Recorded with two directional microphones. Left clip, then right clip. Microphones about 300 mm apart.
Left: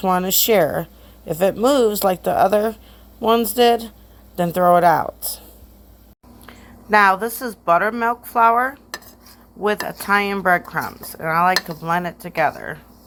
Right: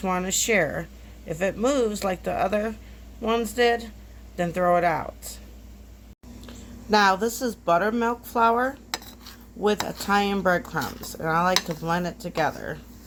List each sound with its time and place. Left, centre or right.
0.0 s a woman's voice: left
6.9 s speech: centre
10.1 s speech: centre